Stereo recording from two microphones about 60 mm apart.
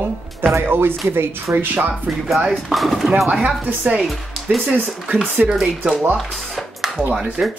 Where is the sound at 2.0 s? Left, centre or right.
Centre.